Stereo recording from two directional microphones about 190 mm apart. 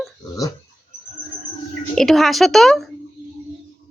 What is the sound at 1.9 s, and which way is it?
Speech, centre (ahead or behind).